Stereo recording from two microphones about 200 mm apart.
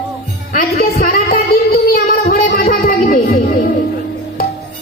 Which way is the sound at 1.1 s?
40° left (ahead or behind).